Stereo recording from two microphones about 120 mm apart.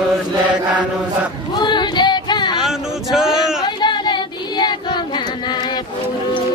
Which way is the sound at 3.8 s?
40° left (ahead or behind).